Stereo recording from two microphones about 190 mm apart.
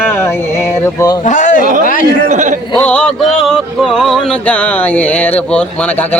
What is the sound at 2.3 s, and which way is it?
Speech, 40° right (ahead or behind).